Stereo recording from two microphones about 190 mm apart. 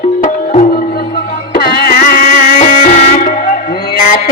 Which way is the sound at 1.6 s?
50° left (ahead or behind).